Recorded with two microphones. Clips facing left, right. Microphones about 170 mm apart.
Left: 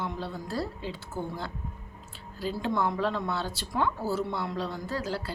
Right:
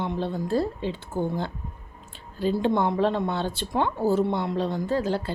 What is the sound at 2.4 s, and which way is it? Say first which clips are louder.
A woman's voice: right 6 dB; 25° right (ahead or behind).